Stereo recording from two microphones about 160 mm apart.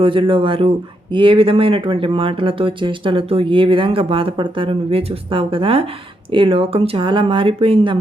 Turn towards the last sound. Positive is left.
turn(degrees=-35)  # may be behind; listen again after turning